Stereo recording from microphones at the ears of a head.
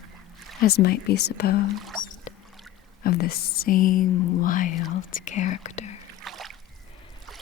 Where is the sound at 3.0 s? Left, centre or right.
Left.